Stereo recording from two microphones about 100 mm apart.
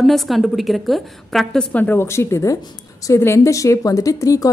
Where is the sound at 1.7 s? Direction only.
15° left (ahead or behind).